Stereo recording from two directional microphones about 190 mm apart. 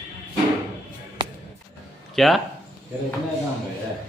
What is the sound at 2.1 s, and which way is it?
Speech, centre (ahead or behind).